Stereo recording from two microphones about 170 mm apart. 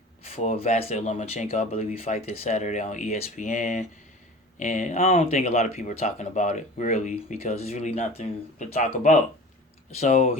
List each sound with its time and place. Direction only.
0.3 s speech: 40° left (ahead or behind)